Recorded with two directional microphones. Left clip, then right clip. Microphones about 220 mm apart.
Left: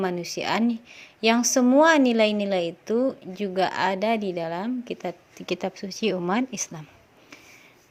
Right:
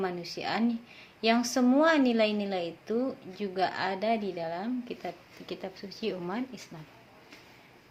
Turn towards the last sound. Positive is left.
turn(degrees=45)  # may be behind; listen again after turning